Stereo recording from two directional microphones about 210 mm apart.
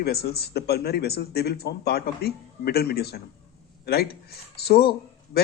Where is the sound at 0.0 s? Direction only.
50° left (ahead or behind).